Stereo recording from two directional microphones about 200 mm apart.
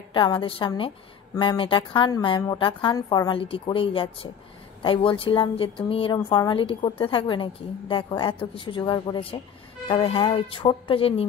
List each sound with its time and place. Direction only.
0.1 s a woman's voice: 25° left (ahead or behind)